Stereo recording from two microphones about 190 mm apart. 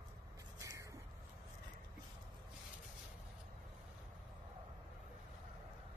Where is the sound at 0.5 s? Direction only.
15° right (ahead or behind).